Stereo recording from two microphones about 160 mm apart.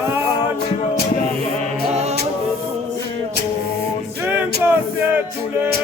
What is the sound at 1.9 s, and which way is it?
Music, 40° right (ahead or behind).